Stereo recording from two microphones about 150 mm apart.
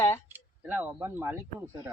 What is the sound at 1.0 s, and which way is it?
Speech, 15° right (ahead or behind).